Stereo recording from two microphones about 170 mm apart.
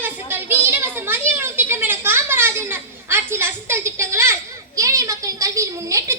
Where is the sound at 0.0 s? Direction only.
10° right (ahead or behind).